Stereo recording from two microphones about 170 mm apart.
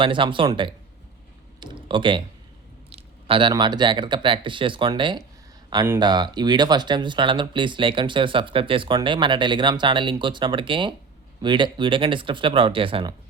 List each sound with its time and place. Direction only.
0.0 s speech: 30° right (ahead or behind)
1.5 s typing: 30° right (ahead or behind)
2.9 s speech: 30° right (ahead or behind)